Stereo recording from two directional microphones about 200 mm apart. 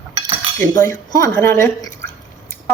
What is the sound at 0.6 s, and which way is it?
Speech, 10° left (ahead or behind).